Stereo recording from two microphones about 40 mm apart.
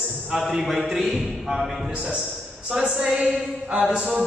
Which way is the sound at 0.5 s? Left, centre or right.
Centre.